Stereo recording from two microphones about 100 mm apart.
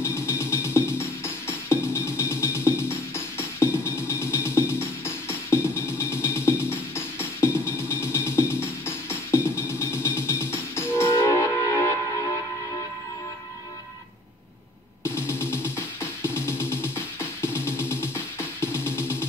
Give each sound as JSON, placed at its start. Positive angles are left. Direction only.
{"t": 0.0, "sound": "music", "side_deg": 25}
{"t": 15.0, "sound": "music", "side_deg": 25}